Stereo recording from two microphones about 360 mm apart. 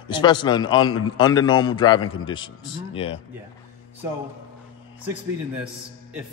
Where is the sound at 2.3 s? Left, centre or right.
Centre.